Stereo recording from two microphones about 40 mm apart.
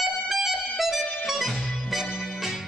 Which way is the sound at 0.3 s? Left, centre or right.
Centre.